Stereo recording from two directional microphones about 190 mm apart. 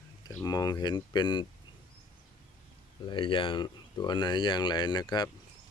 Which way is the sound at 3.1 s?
25° left (ahead or behind).